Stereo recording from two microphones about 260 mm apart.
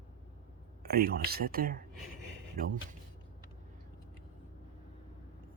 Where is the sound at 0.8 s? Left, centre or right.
Right.